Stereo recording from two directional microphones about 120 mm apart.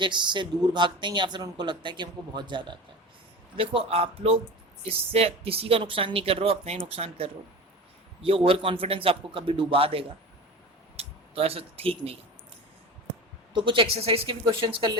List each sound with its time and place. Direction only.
0.0 s speech: 40° right (ahead or behind)
13.5 s speech: 40° right (ahead or behind)